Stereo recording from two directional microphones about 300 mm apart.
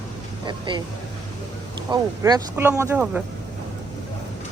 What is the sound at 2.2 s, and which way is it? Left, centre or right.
Speech, centre.